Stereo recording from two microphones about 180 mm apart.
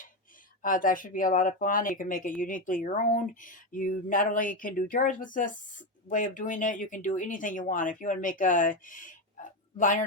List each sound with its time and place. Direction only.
0.6 s speech: 50° left (ahead or behind)